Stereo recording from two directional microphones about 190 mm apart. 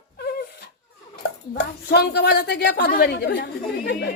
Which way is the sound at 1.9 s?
60° left (ahead or behind).